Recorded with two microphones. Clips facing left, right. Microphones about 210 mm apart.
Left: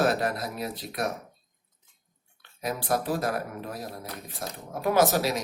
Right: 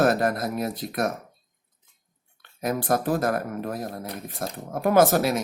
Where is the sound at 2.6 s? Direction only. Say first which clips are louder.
Right 4 dB; 50° right (ahead or behind).